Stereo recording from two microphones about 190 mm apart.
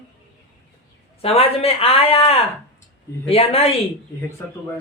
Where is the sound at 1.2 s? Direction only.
30° left (ahead or behind).